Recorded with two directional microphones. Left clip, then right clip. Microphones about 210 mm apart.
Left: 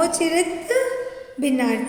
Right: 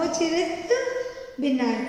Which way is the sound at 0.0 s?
55° left (ahead or behind).